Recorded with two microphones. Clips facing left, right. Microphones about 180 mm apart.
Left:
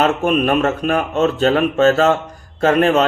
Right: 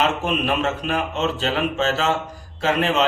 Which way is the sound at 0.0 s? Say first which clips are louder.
Left 6 dB; 50° left (ahead or behind).